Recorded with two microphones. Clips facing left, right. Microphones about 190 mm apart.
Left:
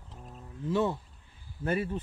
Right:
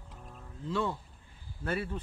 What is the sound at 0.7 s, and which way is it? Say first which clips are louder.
Speech: left 4 dB; 20° left (ahead or behind).